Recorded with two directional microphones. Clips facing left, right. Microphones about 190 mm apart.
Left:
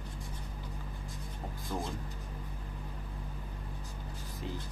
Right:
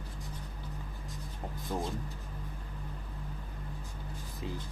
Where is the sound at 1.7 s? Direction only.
20° right (ahead or behind).